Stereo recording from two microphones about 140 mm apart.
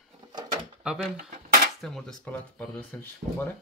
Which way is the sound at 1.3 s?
90° right.